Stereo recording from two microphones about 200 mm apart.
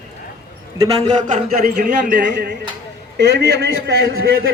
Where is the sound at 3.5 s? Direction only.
60° right (ahead or behind).